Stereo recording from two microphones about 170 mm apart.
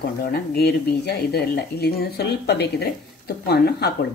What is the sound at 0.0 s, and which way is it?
Speech, 65° left (ahead or behind).